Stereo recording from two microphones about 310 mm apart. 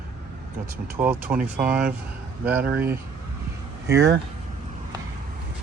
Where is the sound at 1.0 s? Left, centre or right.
Centre.